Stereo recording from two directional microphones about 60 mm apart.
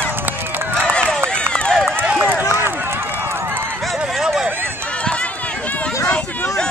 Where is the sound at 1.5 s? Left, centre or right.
Centre.